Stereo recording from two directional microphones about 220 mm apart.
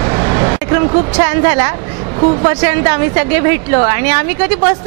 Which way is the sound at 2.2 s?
25° right (ahead or behind).